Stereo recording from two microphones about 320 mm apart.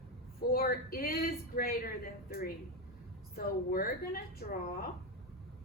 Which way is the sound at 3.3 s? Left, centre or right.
Left.